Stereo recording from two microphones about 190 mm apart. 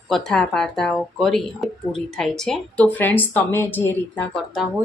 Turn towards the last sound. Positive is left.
turn(degrees=0)  # may be behind; listen again after turning